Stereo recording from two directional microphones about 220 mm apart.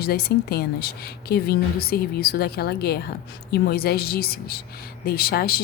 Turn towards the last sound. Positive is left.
turn(degrees=45)  # may be behind; listen again after turning